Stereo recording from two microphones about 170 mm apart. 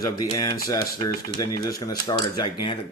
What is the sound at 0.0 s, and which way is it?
Speech, 20° left (ahead or behind).